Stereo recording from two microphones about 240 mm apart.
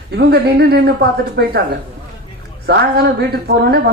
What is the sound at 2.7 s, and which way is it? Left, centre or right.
Speech, right.